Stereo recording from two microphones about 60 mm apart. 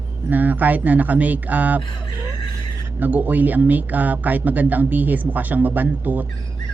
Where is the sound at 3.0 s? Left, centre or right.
Right.